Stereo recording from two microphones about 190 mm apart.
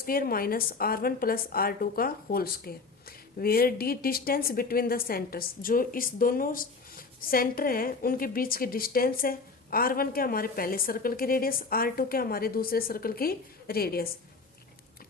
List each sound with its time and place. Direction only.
0.0 s a woman's voice: 50° left (ahead or behind)